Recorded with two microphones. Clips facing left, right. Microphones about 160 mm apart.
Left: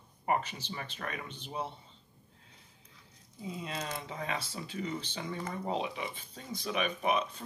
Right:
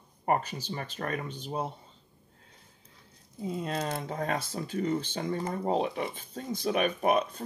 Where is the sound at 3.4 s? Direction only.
50° right (ahead or behind).